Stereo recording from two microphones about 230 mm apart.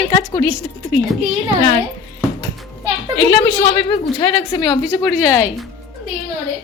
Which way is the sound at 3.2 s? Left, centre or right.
Left.